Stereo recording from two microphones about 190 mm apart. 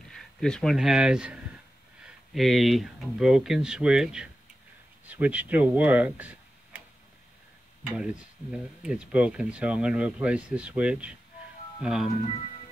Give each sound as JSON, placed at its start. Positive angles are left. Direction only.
{"t": 0.1, "sound": "speech", "side_deg": 5}
{"t": 7.8, "sound": "speech", "side_deg": -5}
{"t": 12.3, "sound": "music", "side_deg": 30}